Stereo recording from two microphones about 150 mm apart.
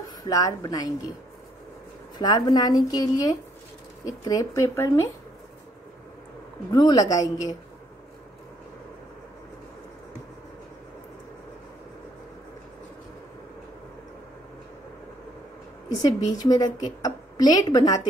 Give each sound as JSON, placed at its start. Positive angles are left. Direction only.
{"t": 0.2, "sound": "a woman's voice", "side_deg": 25}
{"t": 2.1, "sound": "a woman's voice", "side_deg": 30}
{"t": 6.7, "sound": "a woman's voice", "side_deg": 25}
{"t": 16.0, "sound": "a woman's voice", "side_deg": 25}